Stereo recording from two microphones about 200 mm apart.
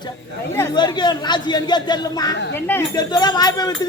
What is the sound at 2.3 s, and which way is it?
Speech, 60° left (ahead or behind).